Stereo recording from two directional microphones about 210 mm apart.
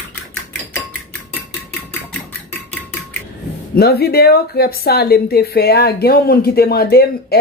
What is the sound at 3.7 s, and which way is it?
A woman's voice, 50° left (ahead or behind).